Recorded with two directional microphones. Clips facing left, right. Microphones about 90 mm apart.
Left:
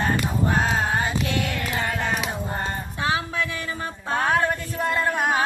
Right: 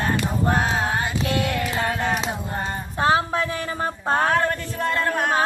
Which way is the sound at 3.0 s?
35° right (ahead or behind).